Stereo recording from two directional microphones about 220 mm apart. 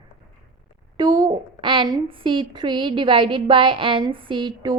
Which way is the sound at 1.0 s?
20° right (ahead or behind).